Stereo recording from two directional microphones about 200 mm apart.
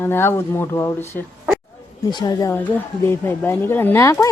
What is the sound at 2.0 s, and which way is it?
Speech, 20° left (ahead or behind).